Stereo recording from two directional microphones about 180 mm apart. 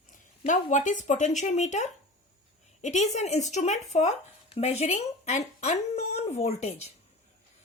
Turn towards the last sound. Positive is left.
turn(degrees=40)  # may be behind; listen again after turning